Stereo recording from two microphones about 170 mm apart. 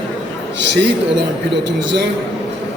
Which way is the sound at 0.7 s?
90° right.